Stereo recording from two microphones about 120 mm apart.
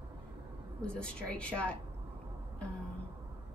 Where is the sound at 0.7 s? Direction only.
10° left (ahead or behind).